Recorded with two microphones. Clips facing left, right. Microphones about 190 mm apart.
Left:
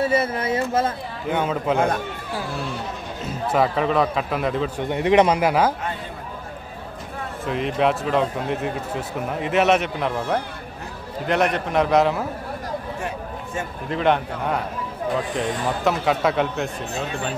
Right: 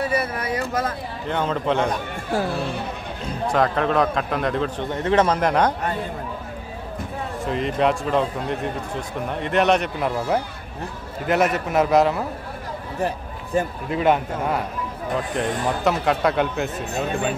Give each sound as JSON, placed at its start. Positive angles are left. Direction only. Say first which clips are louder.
{"t": 0.0, "sound": "speech", "louder": "left 3 dB", "side_deg": 25}
{"t": 1.3, "sound": "a man's voice", "louder": "even", "side_deg": 5}
{"t": 3.3, "sound": "a man's voice", "louder": "even", "side_deg": 5}
{"t": 4.9, "sound": "a man's voice", "louder": "left 3 dB", "side_deg": 15}
{"t": 7.4, "sound": "a man's voice", "louder": "even", "side_deg": 0}
{"t": 13.0, "sound": "a sound", "louder": "right 3 dB", "side_deg": -35}
{"t": 13.8, "sound": "a man's voice", "louder": "left 3 dB", "side_deg": -5}